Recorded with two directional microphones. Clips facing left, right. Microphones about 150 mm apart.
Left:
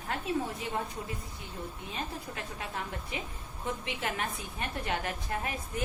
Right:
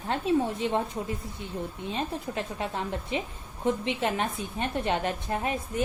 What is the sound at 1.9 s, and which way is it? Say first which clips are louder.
A woman's voice: right 8 dB; 25° right (ahead or behind).